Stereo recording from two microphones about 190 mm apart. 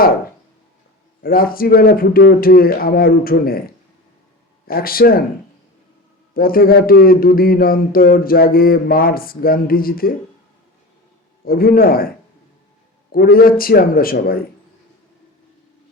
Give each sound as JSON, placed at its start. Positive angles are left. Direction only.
{"t": 1.2, "sound": "speech", "side_deg": 50}
{"t": 4.6, "sound": "speech", "side_deg": 50}
{"t": 6.3, "sound": "speech", "side_deg": 50}
{"t": 11.4, "sound": "speech", "side_deg": 50}